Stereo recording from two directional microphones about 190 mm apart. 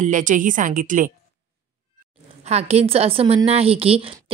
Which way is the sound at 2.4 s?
35° right (ahead or behind).